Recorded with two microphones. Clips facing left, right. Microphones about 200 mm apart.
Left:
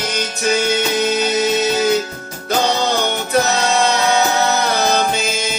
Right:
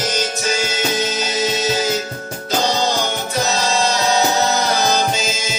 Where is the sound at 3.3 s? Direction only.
60° left (ahead or behind).